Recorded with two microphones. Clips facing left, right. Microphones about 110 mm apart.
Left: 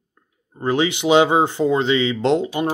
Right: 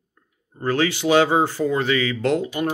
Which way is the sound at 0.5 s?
20° left (ahead or behind).